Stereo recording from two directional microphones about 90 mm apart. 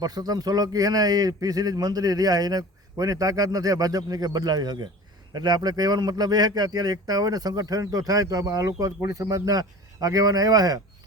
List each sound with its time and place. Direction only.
0.0 s a man's voice: 45° right (ahead or behind)